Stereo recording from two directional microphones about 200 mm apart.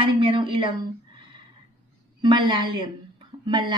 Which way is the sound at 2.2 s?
25° right (ahead or behind).